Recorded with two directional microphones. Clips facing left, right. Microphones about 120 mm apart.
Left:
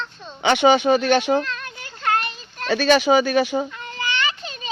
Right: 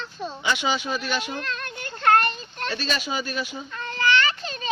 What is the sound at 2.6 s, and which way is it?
Speech, 70° left (ahead or behind).